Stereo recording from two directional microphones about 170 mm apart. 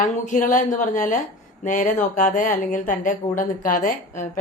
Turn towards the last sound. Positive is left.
turn(degrees=50)  # may be behind; listen again after turning